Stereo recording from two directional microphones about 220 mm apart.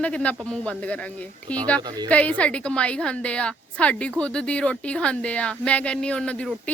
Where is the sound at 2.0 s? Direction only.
5° left (ahead or behind).